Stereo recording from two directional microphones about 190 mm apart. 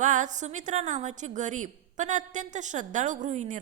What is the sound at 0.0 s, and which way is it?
A woman's voice, 40° right (ahead or behind).